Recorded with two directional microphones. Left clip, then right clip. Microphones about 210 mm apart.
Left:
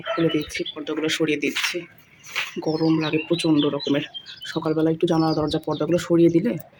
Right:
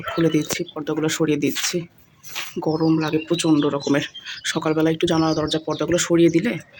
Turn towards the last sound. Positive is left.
turn(degrees=5)  # may be behind; listen again after turning